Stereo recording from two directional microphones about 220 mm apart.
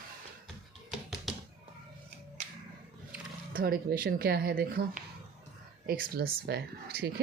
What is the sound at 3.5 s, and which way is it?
Speech, 40° right (ahead or behind).